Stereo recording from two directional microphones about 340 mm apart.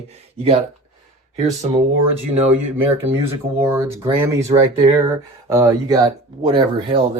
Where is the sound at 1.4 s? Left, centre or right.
Centre.